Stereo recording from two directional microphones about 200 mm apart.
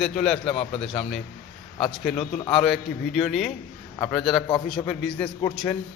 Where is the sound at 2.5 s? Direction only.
Centre (ahead or behind).